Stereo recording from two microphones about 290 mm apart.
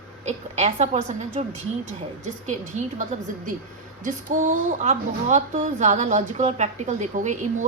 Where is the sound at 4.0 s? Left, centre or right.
Right.